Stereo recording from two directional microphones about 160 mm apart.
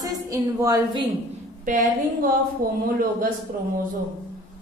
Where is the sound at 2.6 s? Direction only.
65° right (ahead or behind).